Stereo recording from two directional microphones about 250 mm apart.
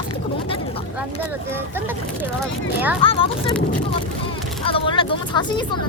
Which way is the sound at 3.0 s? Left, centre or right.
Left.